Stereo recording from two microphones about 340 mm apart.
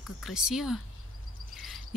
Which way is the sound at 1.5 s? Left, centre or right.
Centre.